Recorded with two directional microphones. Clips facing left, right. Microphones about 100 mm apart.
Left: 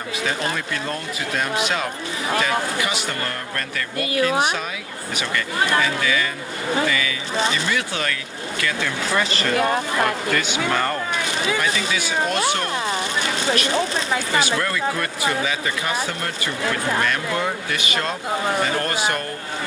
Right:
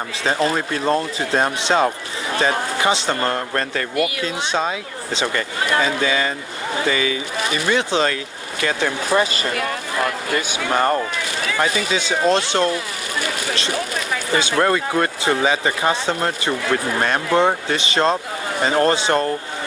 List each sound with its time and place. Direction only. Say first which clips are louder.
0.3 s speech: right 7 dB; 30° right (ahead or behind)
9.6 s speech: left 5 dB; 25° left (ahead or behind)
10.3 s speech: right 1 dB; 25° right (ahead or behind)
11.1 s speech: left 1 dB; 20° left (ahead or behind)
11.9 s speech: right 5 dB; 25° right (ahead or behind)
12.7 s a sound: left 2 dB; 25° left (ahead or behind)
13.7 s speech: left 2 dB; 25° left (ahead or behind)
14.6 s speech: right 6 dB; 35° right (ahead or behind)